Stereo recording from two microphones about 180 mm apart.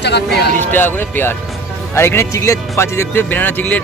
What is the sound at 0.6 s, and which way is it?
Speech, 10° left (ahead or behind).